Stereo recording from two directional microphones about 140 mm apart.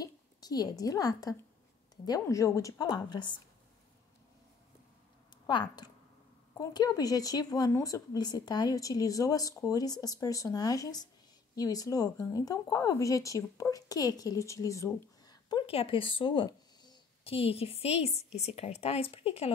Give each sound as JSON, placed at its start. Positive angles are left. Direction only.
{"t": 0.0, "sound": "a woman's voice", "side_deg": 30}
{"t": 5.5, "sound": "speech", "side_deg": 35}
{"t": 15.6, "sound": "a woman's voice", "side_deg": 40}